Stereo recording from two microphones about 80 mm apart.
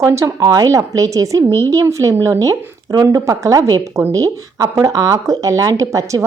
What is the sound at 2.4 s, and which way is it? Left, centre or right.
Speech, right.